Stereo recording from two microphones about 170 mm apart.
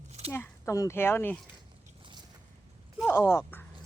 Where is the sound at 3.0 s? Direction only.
15° left (ahead or behind).